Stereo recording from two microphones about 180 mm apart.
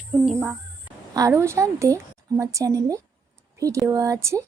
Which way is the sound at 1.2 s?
15° right (ahead or behind).